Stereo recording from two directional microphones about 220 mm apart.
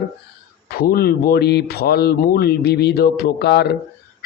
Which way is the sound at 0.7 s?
45° left (ahead or behind).